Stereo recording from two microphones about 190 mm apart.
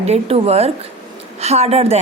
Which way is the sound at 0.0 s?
35° right (ahead or behind).